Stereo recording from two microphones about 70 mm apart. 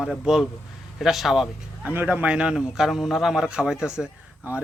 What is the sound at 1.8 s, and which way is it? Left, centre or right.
A man's voice, right.